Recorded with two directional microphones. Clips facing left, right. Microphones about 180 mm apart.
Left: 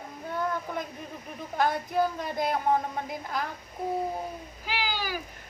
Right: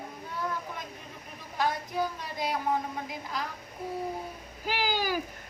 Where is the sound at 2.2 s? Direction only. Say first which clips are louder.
Left 4 dB; 50° left (ahead or behind).